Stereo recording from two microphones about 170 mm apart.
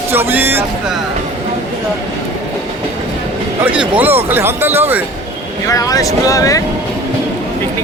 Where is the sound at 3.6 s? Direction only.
10° right (ahead or behind).